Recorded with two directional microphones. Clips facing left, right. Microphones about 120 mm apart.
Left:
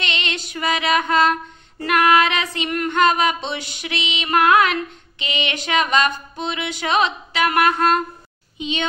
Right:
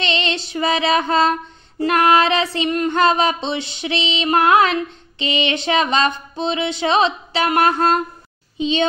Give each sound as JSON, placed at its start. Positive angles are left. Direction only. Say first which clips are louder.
{"t": 0.0, "sound": "female singing", "louder": "right 5 dB", "side_deg": -30}
{"t": 1.8, "sound": "child singing", "louder": "right 2 dB", "side_deg": -30}
{"t": 5.2, "sound": "a sound", "louder": "right 5 dB", "side_deg": -30}
{"t": 8.5, "sound": "a child's voice", "louder": "right 7 dB", "side_deg": -30}